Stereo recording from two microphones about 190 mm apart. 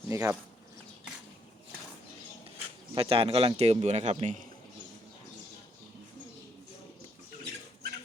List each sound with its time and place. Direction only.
0.1 s speech: 15° right (ahead or behind)
2.9 s speech: 30° right (ahead or behind)